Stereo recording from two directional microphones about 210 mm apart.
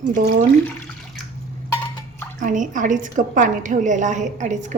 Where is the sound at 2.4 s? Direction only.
40° right (ahead or behind).